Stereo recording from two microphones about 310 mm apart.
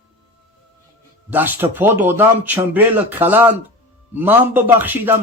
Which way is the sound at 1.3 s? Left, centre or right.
Centre.